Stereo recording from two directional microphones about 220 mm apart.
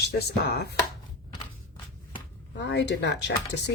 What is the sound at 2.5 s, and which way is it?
Speech, 50° left (ahead or behind).